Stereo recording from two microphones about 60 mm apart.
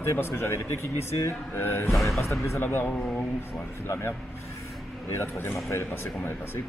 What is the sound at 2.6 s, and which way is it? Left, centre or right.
A man's voice, left.